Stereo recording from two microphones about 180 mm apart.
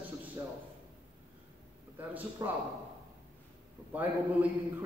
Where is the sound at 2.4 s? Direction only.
20° right (ahead or behind).